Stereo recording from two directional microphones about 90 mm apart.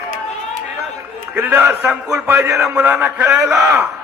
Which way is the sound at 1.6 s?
25° right (ahead or behind).